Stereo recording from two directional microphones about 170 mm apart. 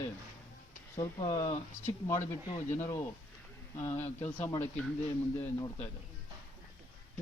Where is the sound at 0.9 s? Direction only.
25° left (ahead or behind).